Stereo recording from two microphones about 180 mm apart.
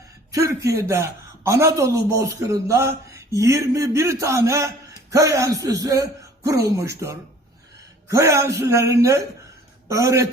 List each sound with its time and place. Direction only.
0.3 s a man's voice: 20° right (ahead or behind)
8.0 s a man's voice: 15° right (ahead or behind)